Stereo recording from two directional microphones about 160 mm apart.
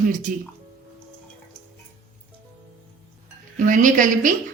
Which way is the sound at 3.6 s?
55° right (ahead or behind).